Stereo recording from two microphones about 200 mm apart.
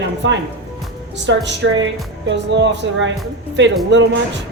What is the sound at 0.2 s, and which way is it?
A woman's voice, 70° right (ahead or behind).